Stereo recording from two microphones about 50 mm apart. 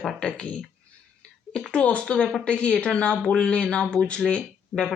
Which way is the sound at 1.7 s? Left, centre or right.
Left.